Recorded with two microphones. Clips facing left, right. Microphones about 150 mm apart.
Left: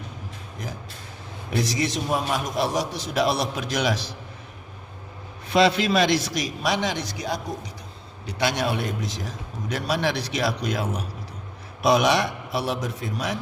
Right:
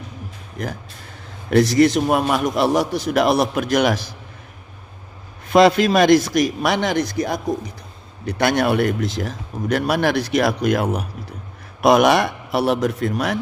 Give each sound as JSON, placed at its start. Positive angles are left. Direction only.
{"t": 1.5, "sound": "a man's voice", "side_deg": -65}
{"t": 5.5, "sound": "a man's voice", "side_deg": -50}